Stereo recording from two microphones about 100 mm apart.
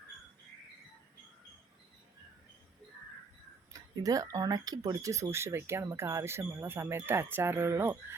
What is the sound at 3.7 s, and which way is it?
Speech, 35° right (ahead or behind).